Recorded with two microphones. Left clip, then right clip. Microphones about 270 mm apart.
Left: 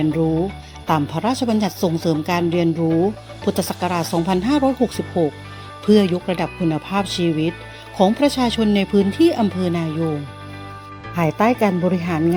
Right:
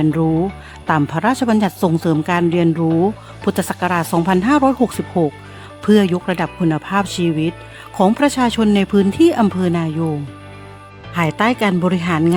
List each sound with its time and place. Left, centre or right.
0.0 s speech: right
11.1 s speech: right